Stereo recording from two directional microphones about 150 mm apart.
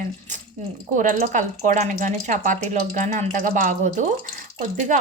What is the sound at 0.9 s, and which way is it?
Speech, 60° right (ahead or behind).